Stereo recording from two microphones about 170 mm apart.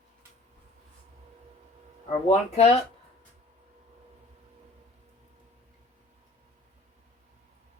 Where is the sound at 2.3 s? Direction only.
40° left (ahead or behind).